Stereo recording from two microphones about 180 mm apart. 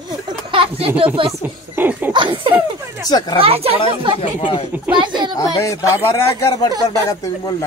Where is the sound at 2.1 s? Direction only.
25° right (ahead or behind).